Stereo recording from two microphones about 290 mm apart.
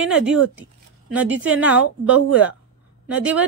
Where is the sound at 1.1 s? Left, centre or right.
Centre.